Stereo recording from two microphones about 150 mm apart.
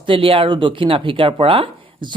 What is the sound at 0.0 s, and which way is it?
Speech, 35° right (ahead or behind).